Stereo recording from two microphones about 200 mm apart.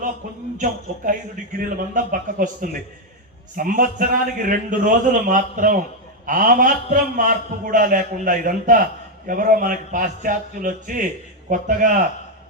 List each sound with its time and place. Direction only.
0.5 s a man's voice: 40° right (ahead or behind)